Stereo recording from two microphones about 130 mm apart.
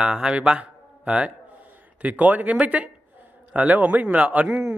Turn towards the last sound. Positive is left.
turn(degrees=-5)  # may be behind; listen again after turning